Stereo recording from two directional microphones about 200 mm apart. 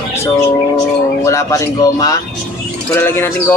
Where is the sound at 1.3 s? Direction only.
15° left (ahead or behind).